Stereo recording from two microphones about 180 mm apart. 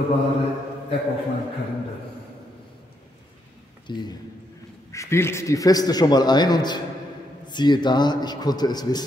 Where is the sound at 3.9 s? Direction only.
25° left (ahead or behind).